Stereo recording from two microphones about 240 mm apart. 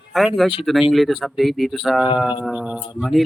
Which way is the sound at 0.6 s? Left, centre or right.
Centre.